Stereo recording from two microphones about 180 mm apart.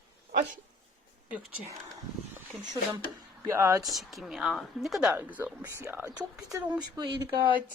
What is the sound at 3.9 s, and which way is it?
A woman's voice, centre (ahead or behind).